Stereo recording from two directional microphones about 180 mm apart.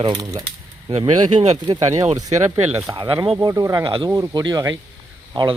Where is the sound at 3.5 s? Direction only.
20° right (ahead or behind).